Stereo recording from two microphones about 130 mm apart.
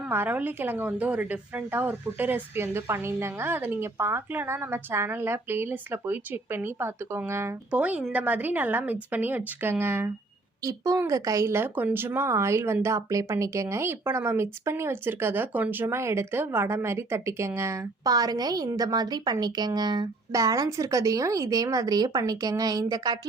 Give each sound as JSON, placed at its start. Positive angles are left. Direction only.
{"t": 0.1, "sound": "a woman's voice", "side_deg": -15}